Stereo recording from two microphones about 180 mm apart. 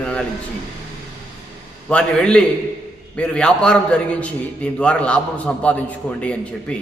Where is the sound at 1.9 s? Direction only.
5° left (ahead or behind).